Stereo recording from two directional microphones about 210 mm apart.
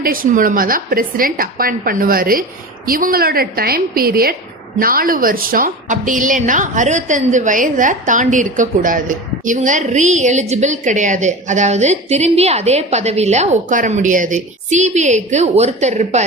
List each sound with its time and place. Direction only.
0.0 s a woman's voice: 45° right (ahead or behind)